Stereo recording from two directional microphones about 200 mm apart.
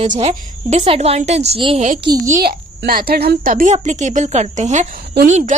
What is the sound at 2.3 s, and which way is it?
A woman's voice, 45° right (ahead or behind).